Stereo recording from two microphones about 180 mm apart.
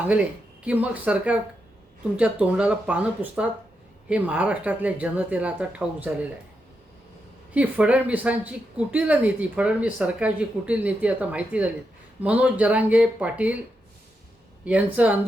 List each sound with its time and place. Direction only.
0.6 s speech: 10° right (ahead or behind)
7.5 s speech: 5° right (ahead or behind)
14.6 s speech: 10° right (ahead or behind)